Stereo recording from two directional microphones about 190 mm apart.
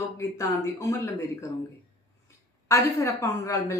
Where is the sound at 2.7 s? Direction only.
15° left (ahead or behind).